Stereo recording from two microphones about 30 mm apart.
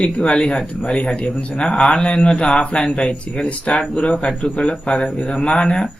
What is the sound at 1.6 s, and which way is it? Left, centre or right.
Speech, left.